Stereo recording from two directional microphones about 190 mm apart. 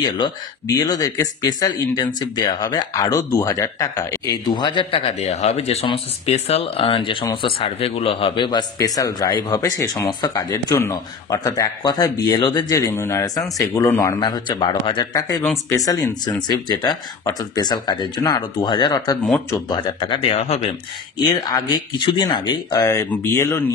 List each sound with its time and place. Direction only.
0.0 s speech: 20° left (ahead or behind)
21.2 s speech: 20° left (ahead or behind)